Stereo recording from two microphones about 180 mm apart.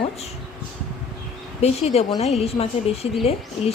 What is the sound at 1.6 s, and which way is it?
A woman's voice, 35° left (ahead or behind).